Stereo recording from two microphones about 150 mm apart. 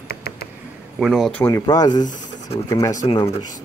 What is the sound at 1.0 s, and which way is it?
Speech, centre (ahead or behind).